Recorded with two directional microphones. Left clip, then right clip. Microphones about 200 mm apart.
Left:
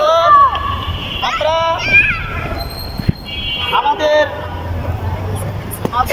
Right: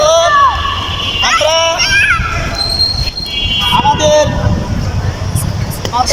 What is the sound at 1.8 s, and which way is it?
Baby cry, 40° right (ahead or behind).